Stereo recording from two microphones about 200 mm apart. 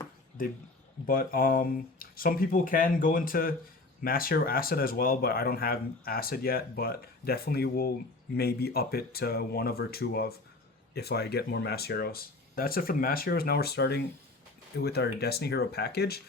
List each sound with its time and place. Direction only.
1.0 s speech: 45° left (ahead or behind)